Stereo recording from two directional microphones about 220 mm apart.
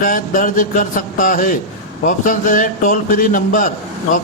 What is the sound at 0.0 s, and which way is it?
Music, 40° left (ahead or behind).